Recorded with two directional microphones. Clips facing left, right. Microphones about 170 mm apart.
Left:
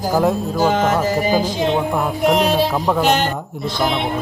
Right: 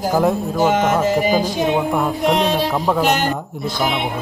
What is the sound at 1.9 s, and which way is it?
Speech, centre (ahead or behind).